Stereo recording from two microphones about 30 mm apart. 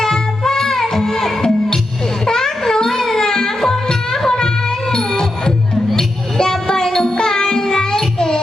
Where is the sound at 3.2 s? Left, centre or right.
Centre.